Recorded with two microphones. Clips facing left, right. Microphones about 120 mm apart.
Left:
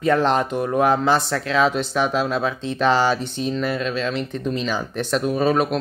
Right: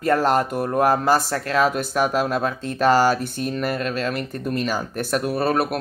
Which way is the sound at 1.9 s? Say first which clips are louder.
Even; 10° right (ahead or behind).